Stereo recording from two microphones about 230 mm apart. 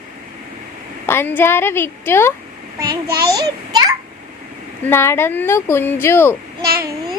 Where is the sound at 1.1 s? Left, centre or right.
Centre.